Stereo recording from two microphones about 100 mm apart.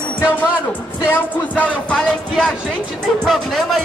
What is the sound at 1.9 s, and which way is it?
Speech, 5° left (ahead or behind).